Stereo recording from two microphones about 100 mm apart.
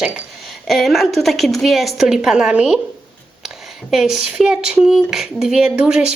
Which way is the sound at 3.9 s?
5° right (ahead or behind).